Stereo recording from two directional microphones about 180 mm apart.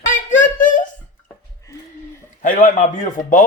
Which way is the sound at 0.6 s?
45° left (ahead or behind).